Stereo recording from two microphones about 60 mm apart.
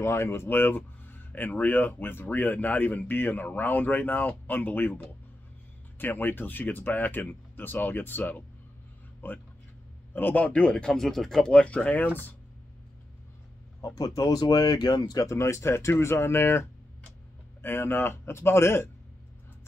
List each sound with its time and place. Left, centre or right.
0.0 s speech: left; by 11.5 s centre
11.5 s speech: left
13.7 s speech: left
15.3 s speech: left